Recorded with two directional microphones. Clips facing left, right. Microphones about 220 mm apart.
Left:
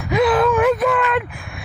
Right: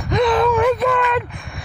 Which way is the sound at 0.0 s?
5° left (ahead or behind).